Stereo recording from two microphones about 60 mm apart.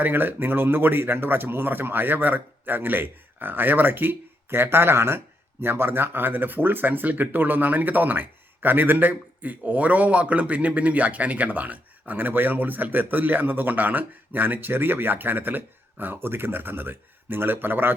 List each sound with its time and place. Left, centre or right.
0.0 s speech: right